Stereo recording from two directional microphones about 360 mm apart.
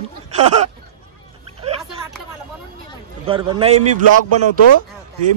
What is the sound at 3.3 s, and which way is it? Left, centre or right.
Speech, centre.